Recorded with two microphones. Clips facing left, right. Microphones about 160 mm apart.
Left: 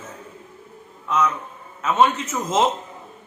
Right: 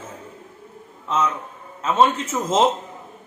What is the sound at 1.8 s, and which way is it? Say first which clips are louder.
Speech: even; 30° right (ahead or behind).